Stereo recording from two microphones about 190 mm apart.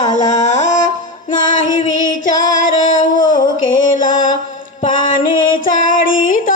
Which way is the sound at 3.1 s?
45° left (ahead or behind).